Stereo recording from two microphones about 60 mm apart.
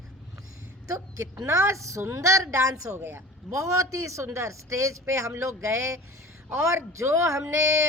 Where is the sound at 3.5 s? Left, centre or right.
Right.